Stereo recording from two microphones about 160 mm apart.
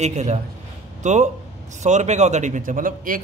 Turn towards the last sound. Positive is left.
turn(degrees=-60)  # may be behind; listen again after turning